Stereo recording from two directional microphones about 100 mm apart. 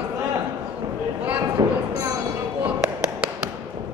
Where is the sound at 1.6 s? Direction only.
40° right (ahead or behind).